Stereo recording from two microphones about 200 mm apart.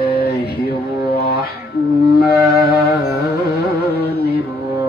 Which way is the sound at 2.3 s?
50° left (ahead or behind).